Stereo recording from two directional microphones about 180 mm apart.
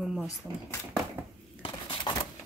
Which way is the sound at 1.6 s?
25° left (ahead or behind).